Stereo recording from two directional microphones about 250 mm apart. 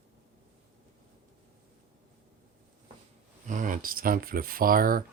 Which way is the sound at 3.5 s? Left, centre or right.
Right.